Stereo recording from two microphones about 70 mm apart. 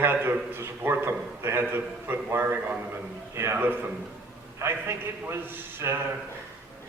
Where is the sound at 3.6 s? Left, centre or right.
Right.